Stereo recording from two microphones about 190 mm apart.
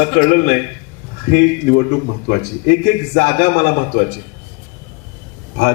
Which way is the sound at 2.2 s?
55° left (ahead or behind).